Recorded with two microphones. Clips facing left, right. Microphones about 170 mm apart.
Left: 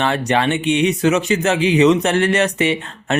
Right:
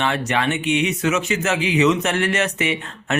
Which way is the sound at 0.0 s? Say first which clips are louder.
Left 4 dB; 35° left (ahead or behind).